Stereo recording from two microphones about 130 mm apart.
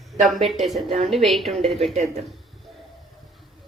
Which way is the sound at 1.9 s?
55° right (ahead or behind).